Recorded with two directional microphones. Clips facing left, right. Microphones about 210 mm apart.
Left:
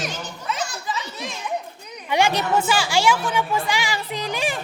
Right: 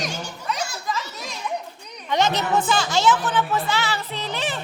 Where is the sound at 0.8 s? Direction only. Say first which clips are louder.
Even; centre (ahead or behind).